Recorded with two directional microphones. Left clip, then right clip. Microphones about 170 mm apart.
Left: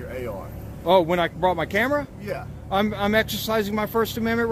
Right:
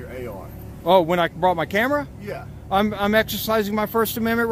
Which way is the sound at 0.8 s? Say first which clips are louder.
Right 2 dB; 55° right (ahead or behind).